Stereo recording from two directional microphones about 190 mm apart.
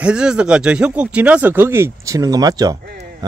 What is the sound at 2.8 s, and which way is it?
Speech, 60° right (ahead or behind).